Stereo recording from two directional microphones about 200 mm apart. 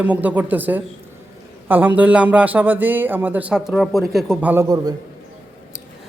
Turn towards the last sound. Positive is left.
turn(degrees=-15)  # may be behind; listen again after turning